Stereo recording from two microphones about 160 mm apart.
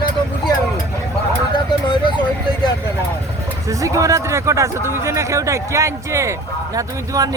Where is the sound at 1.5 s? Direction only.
30° left (ahead or behind).